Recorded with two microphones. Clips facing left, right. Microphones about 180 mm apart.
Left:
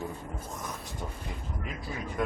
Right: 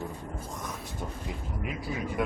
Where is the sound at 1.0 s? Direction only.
5° right (ahead or behind).